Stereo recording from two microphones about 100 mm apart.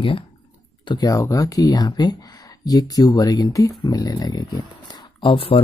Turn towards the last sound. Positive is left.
turn(degrees=60)  # may be behind; listen again after turning